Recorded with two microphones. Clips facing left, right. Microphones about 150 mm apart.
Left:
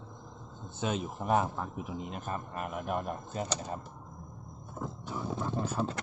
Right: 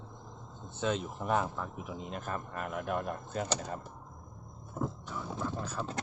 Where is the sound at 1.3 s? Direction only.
45° left (ahead or behind).